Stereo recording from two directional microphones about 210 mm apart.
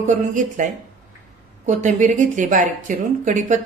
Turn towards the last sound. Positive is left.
turn(degrees=-35)  # may be behind; listen again after turning